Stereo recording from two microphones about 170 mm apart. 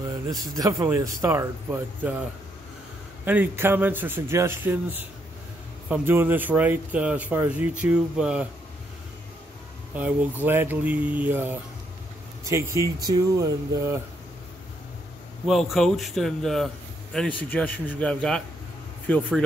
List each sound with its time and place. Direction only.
0.3 s speech: 20° right (ahead or behind)
3.3 s speech: 10° right (ahead or behind)
9.9 s speech: 10° right (ahead or behind)
15.4 s speech: centre (ahead or behind)